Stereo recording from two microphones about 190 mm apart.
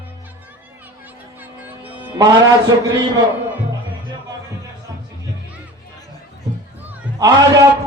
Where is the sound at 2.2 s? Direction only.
20° right (ahead or behind).